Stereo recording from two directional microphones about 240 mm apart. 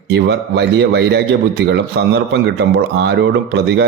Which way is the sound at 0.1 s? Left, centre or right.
Right.